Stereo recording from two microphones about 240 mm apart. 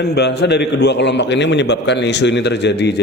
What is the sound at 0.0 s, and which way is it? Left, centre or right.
A man's voice, left.